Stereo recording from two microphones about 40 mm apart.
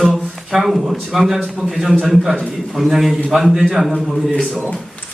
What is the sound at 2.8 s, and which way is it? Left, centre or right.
Speech, centre.